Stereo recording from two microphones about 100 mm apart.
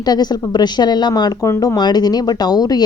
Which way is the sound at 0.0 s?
45° left (ahead or behind).